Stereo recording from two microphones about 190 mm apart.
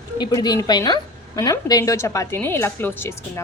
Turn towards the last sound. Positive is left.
turn(degrees=15)  # may be behind; listen again after turning